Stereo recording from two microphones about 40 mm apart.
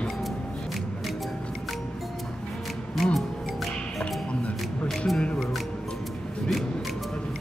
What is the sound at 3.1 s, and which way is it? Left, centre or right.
Music, centre.